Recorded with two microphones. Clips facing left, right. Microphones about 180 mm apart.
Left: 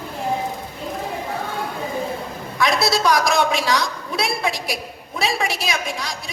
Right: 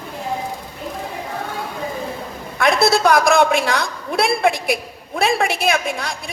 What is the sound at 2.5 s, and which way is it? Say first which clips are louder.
A woman's voice: right 4 dB; 55° right (ahead or behind).